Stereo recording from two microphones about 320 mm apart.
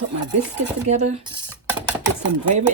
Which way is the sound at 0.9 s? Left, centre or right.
Right.